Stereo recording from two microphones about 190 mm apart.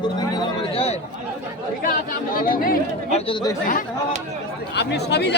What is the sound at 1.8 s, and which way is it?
A man's voice, 45° left (ahead or behind).